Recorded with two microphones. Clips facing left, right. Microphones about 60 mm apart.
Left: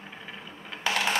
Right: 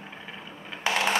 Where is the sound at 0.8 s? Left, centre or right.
Right.